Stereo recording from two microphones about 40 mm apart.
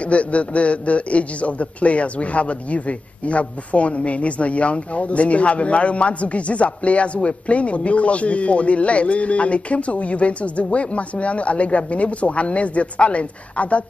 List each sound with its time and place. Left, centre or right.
0.0 s a man's voice: left